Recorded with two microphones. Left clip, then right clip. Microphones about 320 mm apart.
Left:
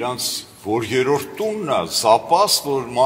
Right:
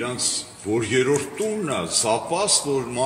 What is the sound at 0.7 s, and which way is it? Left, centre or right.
Speech, centre.